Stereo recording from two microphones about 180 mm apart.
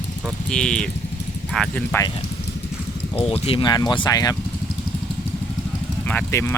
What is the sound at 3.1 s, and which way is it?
Speech, 35° left (ahead or behind).